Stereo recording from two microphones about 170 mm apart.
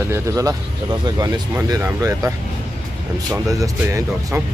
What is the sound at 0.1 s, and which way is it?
Speech, 20° right (ahead or behind).